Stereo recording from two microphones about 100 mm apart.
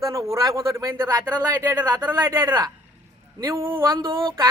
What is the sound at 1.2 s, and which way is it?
Speech, 20° right (ahead or behind).